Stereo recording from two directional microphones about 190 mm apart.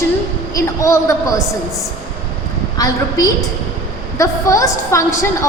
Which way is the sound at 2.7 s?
20° left (ahead or behind).